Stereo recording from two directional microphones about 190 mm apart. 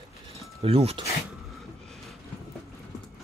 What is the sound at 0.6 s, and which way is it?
Speech, 30° right (ahead or behind).